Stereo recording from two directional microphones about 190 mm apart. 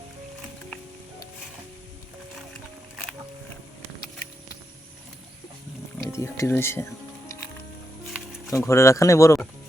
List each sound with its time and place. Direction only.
6.1 s music: 15° left (ahead or behind)
8.4 s speech: 15° left (ahead or behind)